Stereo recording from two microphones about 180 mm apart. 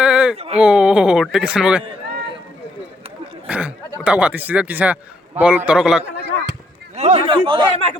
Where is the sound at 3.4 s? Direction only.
5° right (ahead or behind).